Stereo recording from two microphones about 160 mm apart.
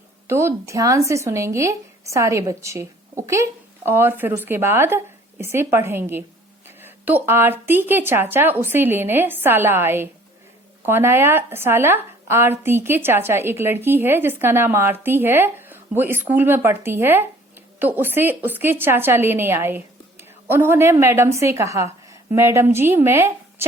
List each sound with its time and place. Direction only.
0.3 s a woman's voice: 15° right (ahead or behind)